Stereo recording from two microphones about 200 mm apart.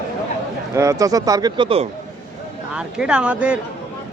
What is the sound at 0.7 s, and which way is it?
Speech, 15° right (ahead or behind).